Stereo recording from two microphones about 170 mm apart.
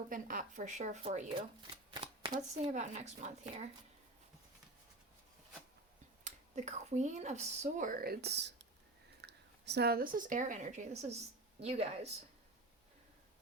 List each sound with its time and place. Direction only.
0.1 s speech: 50° right (ahead or behind)
1.3 s shuffling cards: 30° right (ahead or behind)
2.4 s speech: 40° right (ahead or behind)
6.2 s a woman's voice: 45° right (ahead or behind)